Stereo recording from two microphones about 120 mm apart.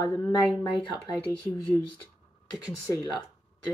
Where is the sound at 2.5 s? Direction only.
30° left (ahead or behind).